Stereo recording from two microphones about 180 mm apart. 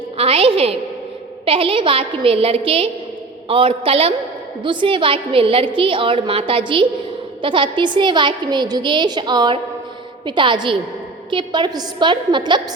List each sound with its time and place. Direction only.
0.2 s a woman's voice: 30° right (ahead or behind)